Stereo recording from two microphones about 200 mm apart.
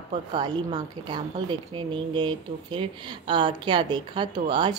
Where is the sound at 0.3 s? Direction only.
20° right (ahead or behind).